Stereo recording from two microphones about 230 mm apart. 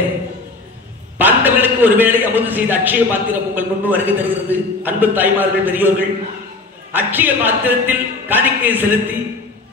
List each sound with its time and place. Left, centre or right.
1.1 s a man's voice: centre